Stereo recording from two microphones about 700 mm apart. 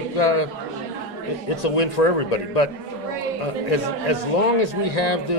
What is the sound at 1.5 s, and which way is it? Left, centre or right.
A man's voice, left.